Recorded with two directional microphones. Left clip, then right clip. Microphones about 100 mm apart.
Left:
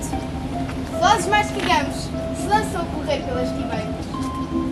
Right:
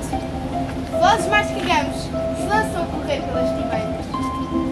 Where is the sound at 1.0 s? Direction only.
10° left (ahead or behind).